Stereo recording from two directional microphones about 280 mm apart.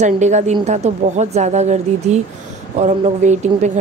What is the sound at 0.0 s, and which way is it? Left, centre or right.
Speech, right.